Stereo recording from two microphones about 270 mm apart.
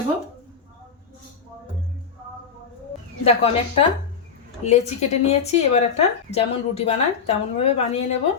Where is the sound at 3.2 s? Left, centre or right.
Left.